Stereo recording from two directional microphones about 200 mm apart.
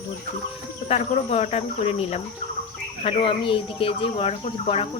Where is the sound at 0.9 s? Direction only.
30° left (ahead or behind).